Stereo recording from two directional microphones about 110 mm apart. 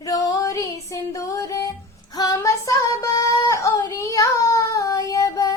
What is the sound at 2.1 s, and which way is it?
Female singing, 35° left (ahead or behind).